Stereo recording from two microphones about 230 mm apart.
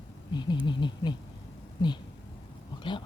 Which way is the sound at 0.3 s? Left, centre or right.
Centre.